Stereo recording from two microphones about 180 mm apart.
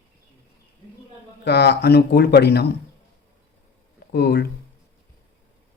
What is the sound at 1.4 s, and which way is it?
Speech, 65° left (ahead or behind).